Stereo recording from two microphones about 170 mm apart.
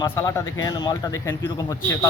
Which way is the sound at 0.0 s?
20° left (ahead or behind).